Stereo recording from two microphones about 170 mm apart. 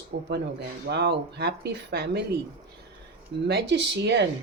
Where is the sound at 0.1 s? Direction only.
90° right.